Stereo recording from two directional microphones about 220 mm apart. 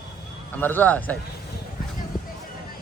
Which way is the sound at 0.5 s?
10° left (ahead or behind).